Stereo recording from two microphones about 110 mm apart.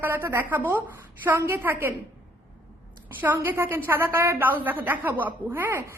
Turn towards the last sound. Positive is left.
turn(degrees=-20)  # may be behind; listen again after turning